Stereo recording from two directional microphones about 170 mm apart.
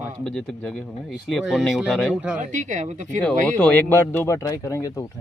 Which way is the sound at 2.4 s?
45° right (ahead or behind).